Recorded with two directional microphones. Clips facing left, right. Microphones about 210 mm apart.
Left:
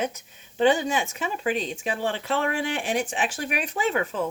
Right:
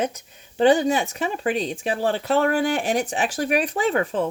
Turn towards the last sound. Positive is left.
turn(degrees=-35)  # may be behind; listen again after turning